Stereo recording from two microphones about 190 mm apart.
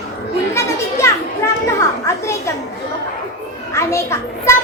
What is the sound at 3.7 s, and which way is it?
Speech, 15° left (ahead or behind).